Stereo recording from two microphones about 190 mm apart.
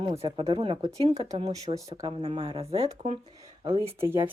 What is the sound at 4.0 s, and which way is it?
Speech, 10° right (ahead or behind).